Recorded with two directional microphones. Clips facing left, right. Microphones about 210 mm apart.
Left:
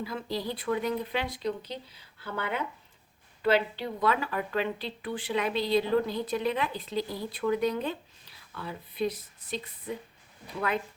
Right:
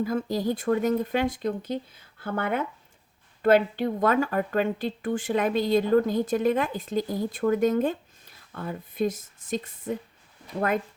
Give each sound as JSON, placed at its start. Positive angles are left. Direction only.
{"t": 0.0, "sound": "speech", "side_deg": -45}